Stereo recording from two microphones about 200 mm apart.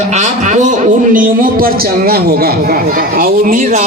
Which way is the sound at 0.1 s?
35° right (ahead or behind).